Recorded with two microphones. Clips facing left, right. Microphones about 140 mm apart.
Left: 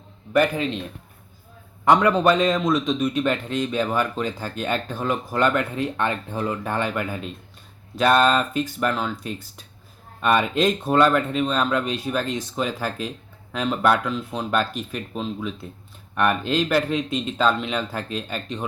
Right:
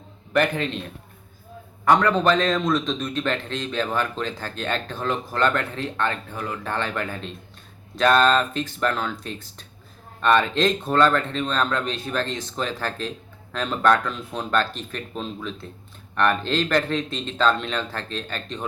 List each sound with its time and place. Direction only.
0.3 s speech: 5° left (ahead or behind)
1.8 s speech: 15° left (ahead or behind)
6.3 s speech: 25° left (ahead or behind)
6.7 s speech: 10° left (ahead or behind)